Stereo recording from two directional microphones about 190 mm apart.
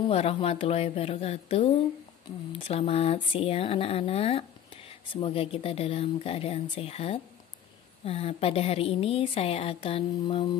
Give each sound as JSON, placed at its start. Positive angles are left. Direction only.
{"t": 0.1, "sound": "speech", "side_deg": 30}